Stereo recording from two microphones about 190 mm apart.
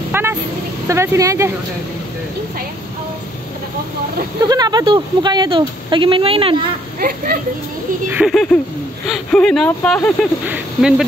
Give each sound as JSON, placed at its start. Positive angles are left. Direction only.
{"t": 0.1, "sound": "vehicle", "side_deg": -10}
{"t": 0.8, "sound": "speech", "side_deg": -15}
{"t": 4.5, "sound": "speech", "side_deg": -20}
{"t": 7.0, "sound": "speech", "side_deg": -50}
{"t": 8.1, "sound": "speech", "side_deg": 0}
{"t": 10.4, "sound": "speech", "side_deg": -5}